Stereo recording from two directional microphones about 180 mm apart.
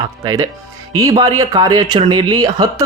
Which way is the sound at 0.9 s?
20° right (ahead or behind).